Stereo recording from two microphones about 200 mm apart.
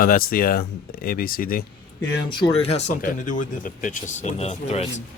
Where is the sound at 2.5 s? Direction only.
30° left (ahead or behind).